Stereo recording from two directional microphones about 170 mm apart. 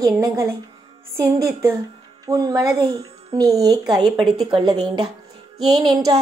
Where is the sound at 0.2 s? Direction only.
20° right (ahead or behind).